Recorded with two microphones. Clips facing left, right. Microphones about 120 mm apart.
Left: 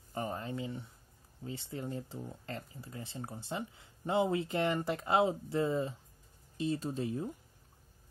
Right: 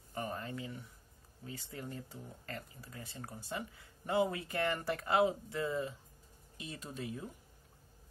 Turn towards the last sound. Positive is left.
turn(degrees=30)  # may be behind; listen again after turning